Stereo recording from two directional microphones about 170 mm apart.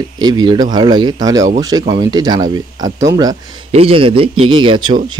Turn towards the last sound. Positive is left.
turn(degrees=-30)  # may be behind; listen again after turning